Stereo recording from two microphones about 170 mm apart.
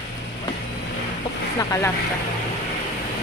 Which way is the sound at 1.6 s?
20° left (ahead or behind).